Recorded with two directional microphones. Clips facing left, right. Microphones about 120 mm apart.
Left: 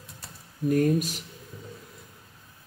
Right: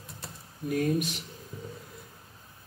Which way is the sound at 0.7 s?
40° left (ahead or behind).